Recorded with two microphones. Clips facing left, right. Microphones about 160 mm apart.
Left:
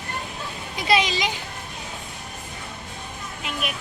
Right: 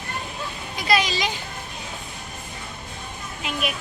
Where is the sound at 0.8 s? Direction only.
20° left (ahead or behind).